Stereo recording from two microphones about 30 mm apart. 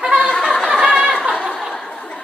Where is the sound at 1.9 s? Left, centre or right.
Left.